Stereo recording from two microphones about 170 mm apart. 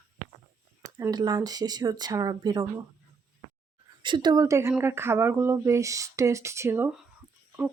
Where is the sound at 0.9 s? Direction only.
20° right (ahead or behind).